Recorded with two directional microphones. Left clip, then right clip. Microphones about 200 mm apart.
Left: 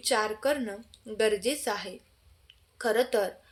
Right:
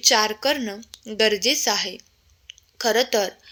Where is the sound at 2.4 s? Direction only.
30° right (ahead or behind).